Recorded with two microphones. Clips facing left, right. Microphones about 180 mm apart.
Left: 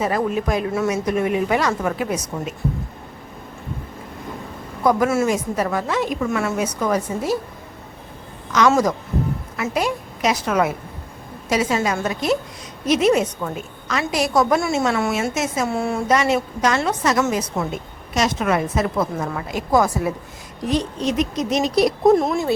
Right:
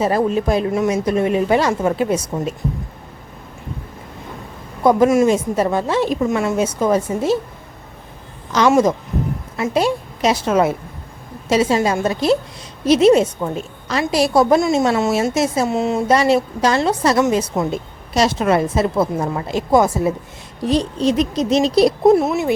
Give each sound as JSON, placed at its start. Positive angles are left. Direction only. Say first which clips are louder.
{"t": 0.0, "sound": "a woman's voice", "louder": "right 4 dB", "side_deg": -30}
{"t": 4.8, "sound": "a woman's voice", "louder": "right 5 dB", "side_deg": -25}
{"t": 8.7, "sound": "a woman's voice", "louder": "right 4 dB", "side_deg": -20}
{"t": 15.1, "sound": "speech", "louder": "right 5 dB", "side_deg": -35}
{"t": 15.6, "sound": "a woman's voice", "louder": "right 4 dB", "side_deg": -20}
{"t": 16.0, "sound": "a woman's voice", "louder": "right 3 dB", "side_deg": -30}
{"t": 22.1, "sound": "speech", "louder": "right 2 dB", "side_deg": -10}